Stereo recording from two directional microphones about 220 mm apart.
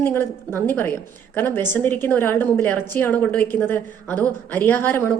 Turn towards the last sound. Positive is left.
turn(degrees=10)  # may be behind; listen again after turning